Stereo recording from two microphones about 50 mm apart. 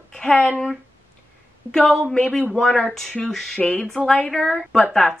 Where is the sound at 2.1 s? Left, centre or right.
Left.